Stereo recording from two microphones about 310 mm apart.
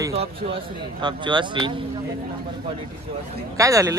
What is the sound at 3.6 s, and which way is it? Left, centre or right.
Speech, centre.